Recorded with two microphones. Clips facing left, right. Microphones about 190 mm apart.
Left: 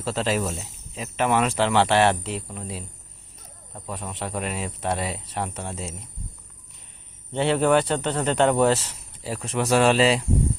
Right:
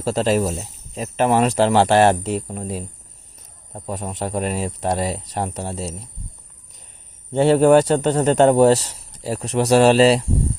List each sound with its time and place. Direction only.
0.0 s speech: 40° right (ahead or behind)
7.3 s speech: 40° right (ahead or behind)